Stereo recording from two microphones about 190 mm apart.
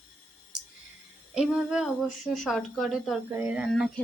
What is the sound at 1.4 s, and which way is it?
A woman's voice, 5° right (ahead or behind).